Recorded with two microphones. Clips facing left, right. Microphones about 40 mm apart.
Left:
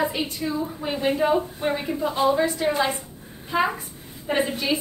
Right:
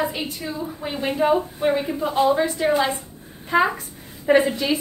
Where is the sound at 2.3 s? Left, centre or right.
Right.